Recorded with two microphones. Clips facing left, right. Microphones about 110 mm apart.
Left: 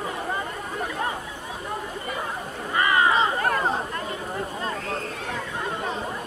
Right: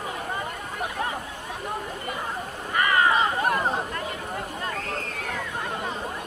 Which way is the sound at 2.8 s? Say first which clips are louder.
Left 1 dB; 25° left (ahead or behind).